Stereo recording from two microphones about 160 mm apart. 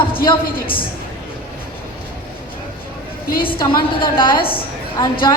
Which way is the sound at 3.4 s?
35° left (ahead or behind).